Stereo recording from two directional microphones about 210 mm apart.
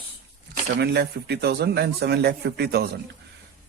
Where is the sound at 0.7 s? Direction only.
50° right (ahead or behind).